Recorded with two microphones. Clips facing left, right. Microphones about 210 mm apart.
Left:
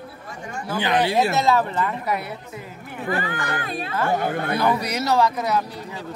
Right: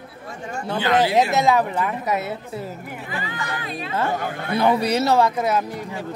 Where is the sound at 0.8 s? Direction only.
20° left (ahead or behind).